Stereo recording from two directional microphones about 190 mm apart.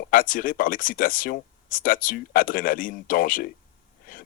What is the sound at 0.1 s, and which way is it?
Speech, 45° left (ahead or behind).